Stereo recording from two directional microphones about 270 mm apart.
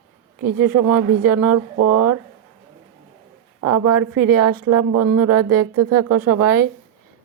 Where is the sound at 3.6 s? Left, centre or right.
Right.